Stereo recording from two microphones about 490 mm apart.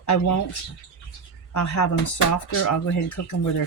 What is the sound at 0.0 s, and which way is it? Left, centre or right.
Speech, left.